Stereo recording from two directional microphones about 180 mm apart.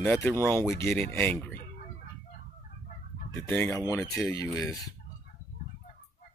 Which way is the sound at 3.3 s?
10° left (ahead or behind).